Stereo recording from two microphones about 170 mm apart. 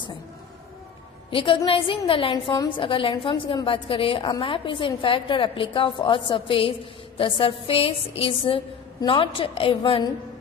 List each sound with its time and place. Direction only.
1.3 s a woman's voice: 30° left (ahead or behind)